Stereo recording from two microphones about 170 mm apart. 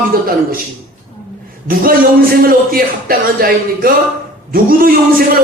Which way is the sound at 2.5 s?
60° right (ahead or behind).